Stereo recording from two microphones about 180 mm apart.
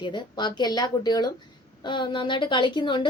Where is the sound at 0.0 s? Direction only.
25° left (ahead or behind).